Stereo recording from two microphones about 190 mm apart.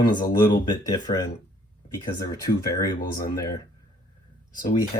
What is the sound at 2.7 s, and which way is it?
Speech, 15° left (ahead or behind).